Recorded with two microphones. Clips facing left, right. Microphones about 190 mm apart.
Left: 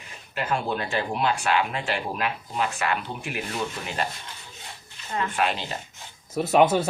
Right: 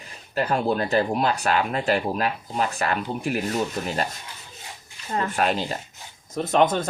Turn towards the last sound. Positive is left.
turn(degrees=10)  # may be behind; listen again after turning